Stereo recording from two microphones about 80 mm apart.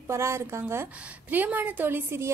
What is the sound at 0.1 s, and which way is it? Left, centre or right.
Speech, right.